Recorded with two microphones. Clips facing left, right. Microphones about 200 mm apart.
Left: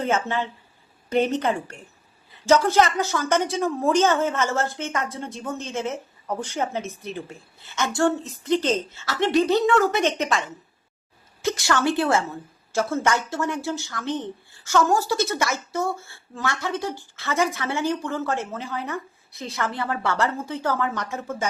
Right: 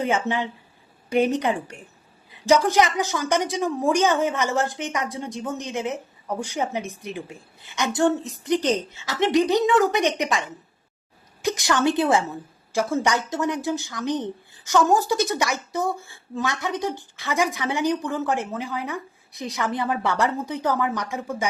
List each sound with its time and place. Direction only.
0.0 s a woman's voice: 15° right (ahead or behind)